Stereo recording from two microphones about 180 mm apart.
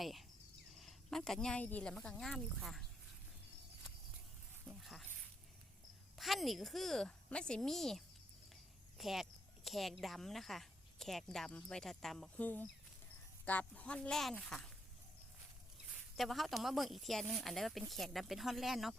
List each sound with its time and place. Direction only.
0.0 s cricket: centre (ahead or behind)
0.8 s speech: centre (ahead or behind)
4.7 s a sound: centre (ahead or behind)
6.1 s a woman's voice: centre (ahead or behind)
16.1 s speech: centre (ahead or behind)